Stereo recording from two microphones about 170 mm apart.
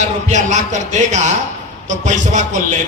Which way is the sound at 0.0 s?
45° right (ahead or behind).